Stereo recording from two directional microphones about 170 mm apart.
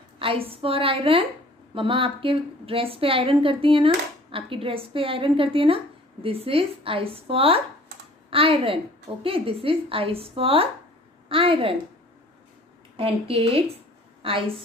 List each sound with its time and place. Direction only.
0.2 s a woman's voice: 35° right (ahead or behind)
12.9 s a woman's voice: 35° right (ahead or behind)